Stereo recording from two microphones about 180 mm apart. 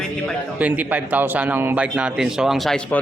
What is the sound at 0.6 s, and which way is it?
A man's voice, 10° right (ahead or behind).